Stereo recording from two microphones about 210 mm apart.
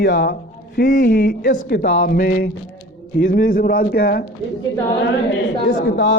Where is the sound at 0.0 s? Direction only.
45° left (ahead or behind).